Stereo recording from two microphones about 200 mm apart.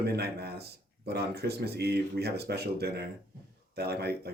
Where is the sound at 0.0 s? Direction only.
55° right (ahead or behind).